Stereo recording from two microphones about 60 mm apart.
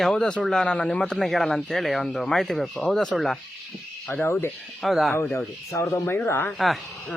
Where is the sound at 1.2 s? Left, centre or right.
Centre.